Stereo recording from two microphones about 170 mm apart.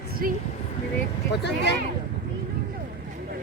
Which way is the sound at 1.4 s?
90° left.